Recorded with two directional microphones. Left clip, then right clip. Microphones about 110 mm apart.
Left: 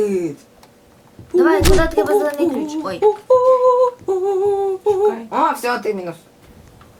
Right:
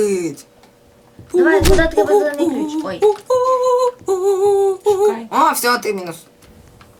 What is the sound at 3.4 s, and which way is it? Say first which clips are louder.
Humming: left 2 dB; centre (ahead or behind).